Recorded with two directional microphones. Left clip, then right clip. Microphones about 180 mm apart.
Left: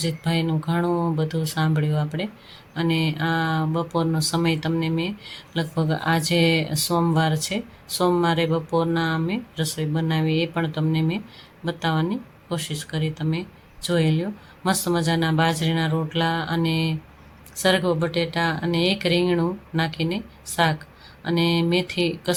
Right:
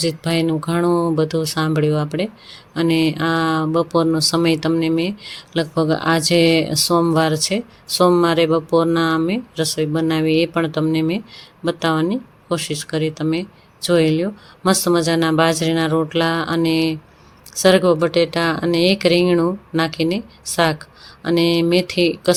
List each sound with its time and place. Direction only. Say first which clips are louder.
0.0 s speech: right 7 dB; 30° right (ahead or behind)